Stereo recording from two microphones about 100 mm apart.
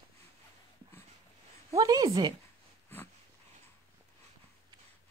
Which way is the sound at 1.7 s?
40° right (ahead or behind).